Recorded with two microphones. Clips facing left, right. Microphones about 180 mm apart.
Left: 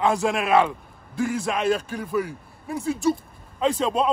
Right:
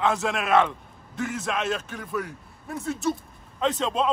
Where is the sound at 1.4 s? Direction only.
35° left (ahead or behind).